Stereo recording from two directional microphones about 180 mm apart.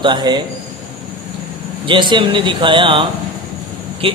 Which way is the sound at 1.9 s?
25° right (ahead or behind).